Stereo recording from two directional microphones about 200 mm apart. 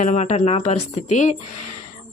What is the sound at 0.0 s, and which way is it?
A woman's voice, 35° left (ahead or behind).